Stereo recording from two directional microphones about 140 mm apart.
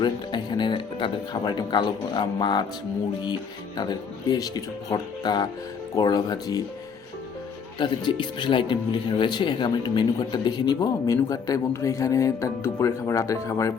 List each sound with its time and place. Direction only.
0.0 s speech: 30° left (ahead or behind)
3.8 s speech: 30° left (ahead or behind)
7.8 s speech: 35° left (ahead or behind)